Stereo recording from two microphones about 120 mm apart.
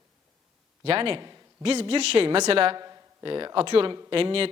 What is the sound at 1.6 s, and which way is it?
Speech, 55° right (ahead or behind).